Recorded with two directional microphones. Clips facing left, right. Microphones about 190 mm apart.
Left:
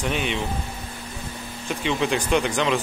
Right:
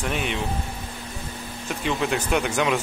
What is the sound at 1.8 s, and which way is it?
Speech, 5° right (ahead or behind).